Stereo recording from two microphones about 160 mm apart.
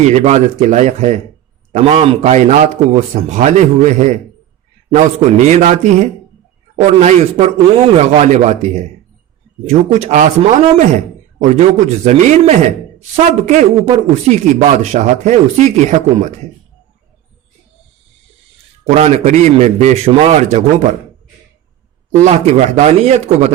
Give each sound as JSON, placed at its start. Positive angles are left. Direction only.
{"t": 0.1, "sound": "a man's voice", "side_deg": -45}
{"t": 18.9, "sound": "a man's voice", "side_deg": -40}
{"t": 22.2, "sound": "a man's voice", "side_deg": -45}